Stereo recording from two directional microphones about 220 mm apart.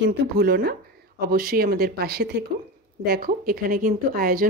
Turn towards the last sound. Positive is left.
turn(degrees=-40)  # may be behind; listen again after turning